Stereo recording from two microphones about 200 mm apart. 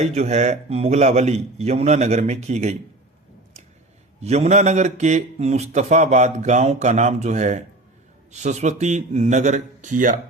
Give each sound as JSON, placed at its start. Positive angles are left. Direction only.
{"t": 0.0, "sound": "a man's voice", "side_deg": -35}
{"t": 4.2, "sound": "a man's voice", "side_deg": -35}